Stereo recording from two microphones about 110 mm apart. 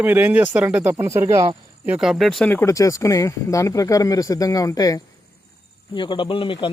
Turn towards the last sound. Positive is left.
turn(degrees=50)  # may be behind; listen again after turning